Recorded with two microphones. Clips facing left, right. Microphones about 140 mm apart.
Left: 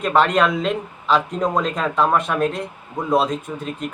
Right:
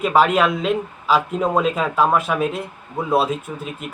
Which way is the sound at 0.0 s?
5° right (ahead or behind).